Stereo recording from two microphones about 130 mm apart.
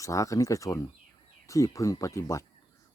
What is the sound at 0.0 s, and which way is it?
Speech, 25° left (ahead or behind).